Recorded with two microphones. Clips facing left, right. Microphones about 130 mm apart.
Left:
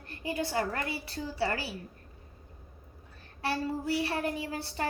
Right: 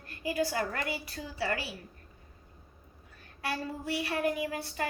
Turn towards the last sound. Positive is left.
turn(degrees=30)  # may be behind; listen again after turning